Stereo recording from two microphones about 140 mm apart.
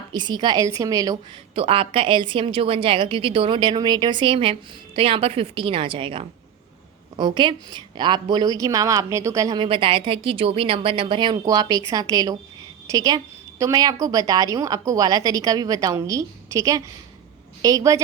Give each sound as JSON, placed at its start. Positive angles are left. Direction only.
{"t": 0.1, "sound": "a woman's voice", "side_deg": -30}
{"t": 1.5, "sound": "a woman's voice", "side_deg": -40}
{"t": 9.6, "sound": "a woman's voice", "side_deg": -40}